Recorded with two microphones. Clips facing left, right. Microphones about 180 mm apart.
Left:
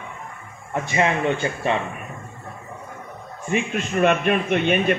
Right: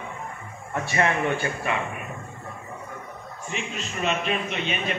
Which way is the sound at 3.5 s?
55° left (ahead or behind).